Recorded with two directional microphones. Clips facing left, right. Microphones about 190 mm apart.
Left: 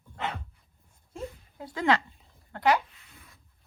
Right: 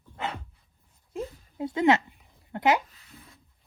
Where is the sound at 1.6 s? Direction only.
25° right (ahead or behind).